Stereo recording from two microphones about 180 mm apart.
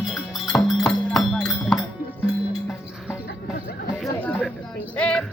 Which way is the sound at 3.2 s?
55° left (ahead or behind).